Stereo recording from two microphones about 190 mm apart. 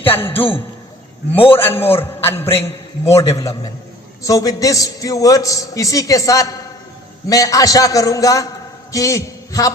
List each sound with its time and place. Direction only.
0.1 s a man's voice: 30° left (ahead or behind)
1.5 s a man's voice: 10° left (ahead or behind)